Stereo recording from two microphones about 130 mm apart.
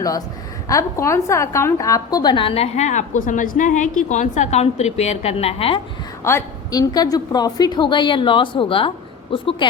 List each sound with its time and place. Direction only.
0.7 s a woman's voice: 25° left (ahead or behind); by 5.8 s 45° left (ahead or behind)
6.2 s a woman's voice: 25° left (ahead or behind); by 9.6 s 40° left (ahead or behind)